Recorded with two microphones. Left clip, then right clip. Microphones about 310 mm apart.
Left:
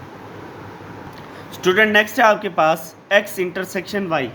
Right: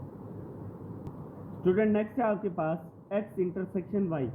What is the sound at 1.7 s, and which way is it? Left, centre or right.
Speech, centre.